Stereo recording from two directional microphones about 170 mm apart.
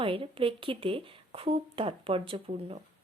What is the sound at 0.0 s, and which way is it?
Speech, 30° right (ahead or behind).